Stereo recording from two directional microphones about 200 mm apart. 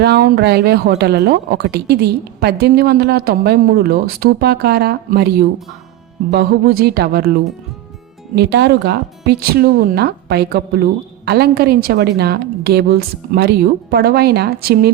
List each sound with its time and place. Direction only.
0.0 s speech: 55° right (ahead or behind)
6.3 s speech: 50° right (ahead or behind)